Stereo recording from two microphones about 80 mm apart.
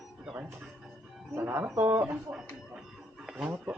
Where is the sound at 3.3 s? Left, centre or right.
Centre.